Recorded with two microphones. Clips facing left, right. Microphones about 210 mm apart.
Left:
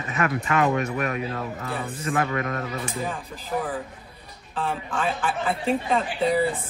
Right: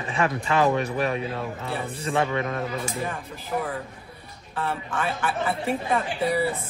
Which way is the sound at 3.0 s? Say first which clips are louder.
Left 1 dB; centre (ahead or behind).